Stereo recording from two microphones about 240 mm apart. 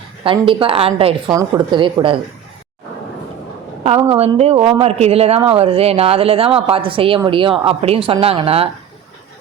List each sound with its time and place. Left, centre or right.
0.3 s a woman's voice: right
3.8 s a woman's voice: right